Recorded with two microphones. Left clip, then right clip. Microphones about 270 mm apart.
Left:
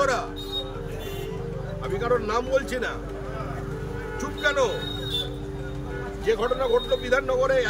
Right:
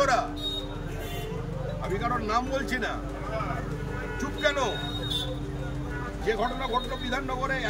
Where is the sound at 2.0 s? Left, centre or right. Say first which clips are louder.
Left 4 dB; centre.